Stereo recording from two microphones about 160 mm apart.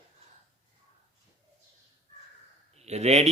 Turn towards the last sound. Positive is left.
turn(degrees=-40)  # may be behind; listen again after turning